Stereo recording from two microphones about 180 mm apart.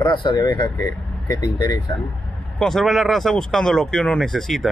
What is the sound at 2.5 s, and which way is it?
Speech, centre (ahead or behind).